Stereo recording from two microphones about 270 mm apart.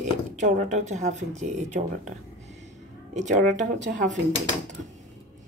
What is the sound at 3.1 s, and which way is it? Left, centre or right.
Speech, right.